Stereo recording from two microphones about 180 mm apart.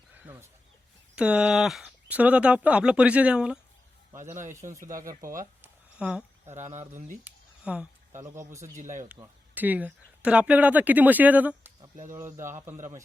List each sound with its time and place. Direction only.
0.1 s chicken: 10° right (ahead or behind)
1.1 s speech: 5° right (ahead or behind)
4.4 s speech: 45° right (ahead or behind)
4.9 s speech: 20° right (ahead or behind)
5.6 s a sound: 5° right (ahead or behind)
6.6 s speech: 40° right (ahead or behind)
7.3 s a sound: 5° right (ahead or behind)
8.2 s speech: 15° right (ahead or behind)
8.7 s speech: 45° right (ahead or behind)
9.6 s speech: 10° right (ahead or behind)